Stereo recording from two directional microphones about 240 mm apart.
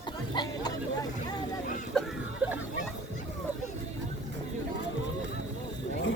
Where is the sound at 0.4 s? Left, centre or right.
Centre.